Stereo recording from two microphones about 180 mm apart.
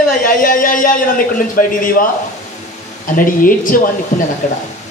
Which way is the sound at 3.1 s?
50° left (ahead or behind).